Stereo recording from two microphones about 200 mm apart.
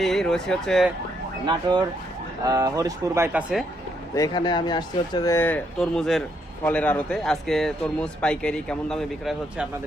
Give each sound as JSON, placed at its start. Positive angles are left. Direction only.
{"t": 0.0, "sound": "speech", "side_deg": 0}
{"t": 2.4, "sound": "speech", "side_deg": -15}
{"t": 4.1, "sound": "a man's voice", "side_deg": 20}